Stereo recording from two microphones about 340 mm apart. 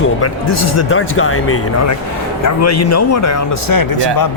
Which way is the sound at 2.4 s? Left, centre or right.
Left.